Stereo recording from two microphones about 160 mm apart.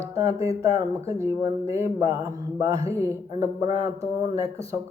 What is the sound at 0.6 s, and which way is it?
Speech, 20° right (ahead or behind).